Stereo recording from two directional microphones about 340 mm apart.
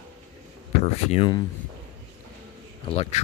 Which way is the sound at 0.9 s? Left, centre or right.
Centre.